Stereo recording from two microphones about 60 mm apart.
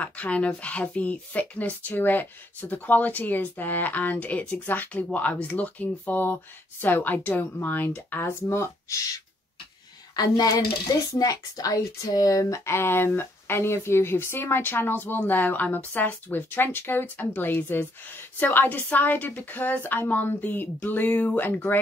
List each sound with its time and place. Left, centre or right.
0.0 s speech: left
10.1 s speech: left
12.7 s speech: left